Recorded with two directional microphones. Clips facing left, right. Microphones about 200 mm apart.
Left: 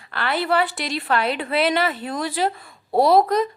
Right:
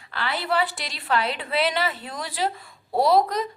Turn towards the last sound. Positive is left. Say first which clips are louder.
# left 4 dB
turn(degrees=55)  # may be behind; listen again after turning